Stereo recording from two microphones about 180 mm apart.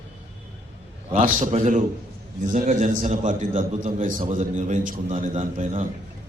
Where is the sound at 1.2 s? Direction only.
45° right (ahead or behind).